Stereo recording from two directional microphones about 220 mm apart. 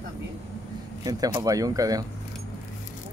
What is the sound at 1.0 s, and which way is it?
Speech, 15° right (ahead or behind).